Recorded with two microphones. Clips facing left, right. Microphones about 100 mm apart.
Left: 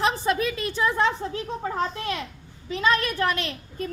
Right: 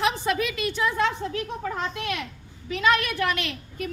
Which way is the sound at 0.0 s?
35° left (ahead or behind).